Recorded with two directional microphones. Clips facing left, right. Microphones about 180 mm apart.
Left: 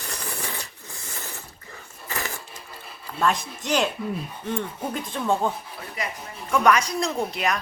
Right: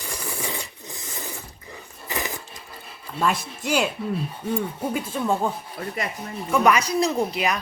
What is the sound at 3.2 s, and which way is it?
Speech, 10° right (ahead or behind).